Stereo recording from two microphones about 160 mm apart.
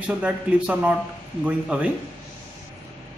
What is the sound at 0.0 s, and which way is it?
Speech, 10° right (ahead or behind).